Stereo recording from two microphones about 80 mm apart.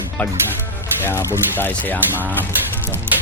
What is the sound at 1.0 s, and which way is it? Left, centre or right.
Speech, left.